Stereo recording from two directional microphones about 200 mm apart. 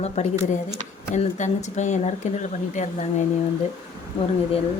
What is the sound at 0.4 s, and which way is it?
Speech, 35° left (ahead or behind).